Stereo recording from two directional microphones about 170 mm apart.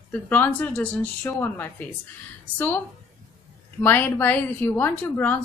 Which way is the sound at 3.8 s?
10° left (ahead or behind).